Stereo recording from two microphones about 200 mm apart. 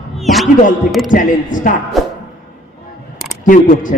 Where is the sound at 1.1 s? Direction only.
40° left (ahead or behind).